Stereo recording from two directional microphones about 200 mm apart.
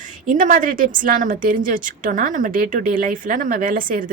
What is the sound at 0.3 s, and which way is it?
A woman's voice, 40° right (ahead or behind).